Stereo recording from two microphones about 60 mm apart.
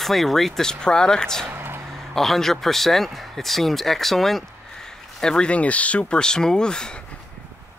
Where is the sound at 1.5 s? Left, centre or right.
Right.